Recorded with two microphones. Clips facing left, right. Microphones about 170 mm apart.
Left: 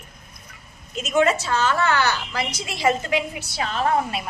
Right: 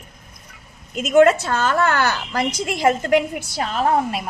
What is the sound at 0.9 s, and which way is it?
A woman's voice, 55° right (ahead or behind).